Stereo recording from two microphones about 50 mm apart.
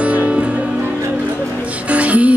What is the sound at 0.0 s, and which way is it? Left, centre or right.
Music, right.